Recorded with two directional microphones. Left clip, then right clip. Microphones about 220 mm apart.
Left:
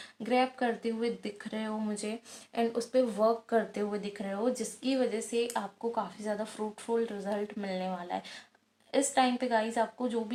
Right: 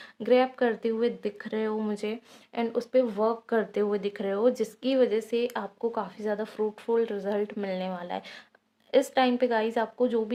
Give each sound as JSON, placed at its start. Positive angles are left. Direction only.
{"t": 0.2, "sound": "speech", "side_deg": -45}
{"t": 2.6, "sound": "speech", "side_deg": -30}